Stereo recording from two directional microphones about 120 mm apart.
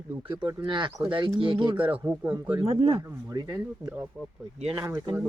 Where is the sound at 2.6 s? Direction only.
50° right (ahead or behind).